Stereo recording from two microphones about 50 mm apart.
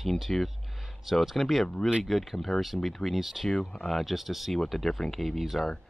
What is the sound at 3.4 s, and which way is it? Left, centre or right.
Speech, centre.